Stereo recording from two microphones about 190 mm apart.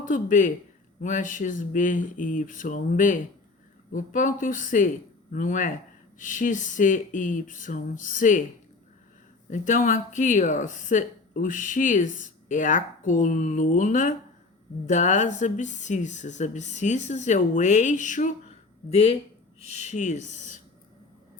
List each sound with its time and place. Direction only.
0.0 s speech: 45° left (ahead or behind)
9.5 s speech: 40° left (ahead or behind)